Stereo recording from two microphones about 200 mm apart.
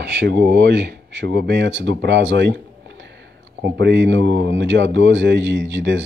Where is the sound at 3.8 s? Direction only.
60° right (ahead or behind).